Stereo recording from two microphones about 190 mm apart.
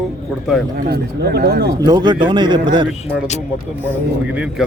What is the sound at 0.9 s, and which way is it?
Speech, 60° right (ahead or behind).